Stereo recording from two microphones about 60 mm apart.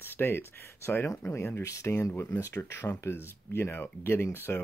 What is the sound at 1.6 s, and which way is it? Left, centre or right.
Speech, left.